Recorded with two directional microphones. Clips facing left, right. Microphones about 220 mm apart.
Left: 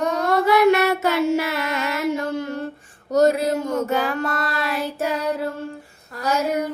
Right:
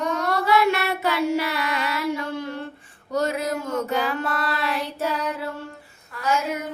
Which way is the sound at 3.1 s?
40° left (ahead or behind).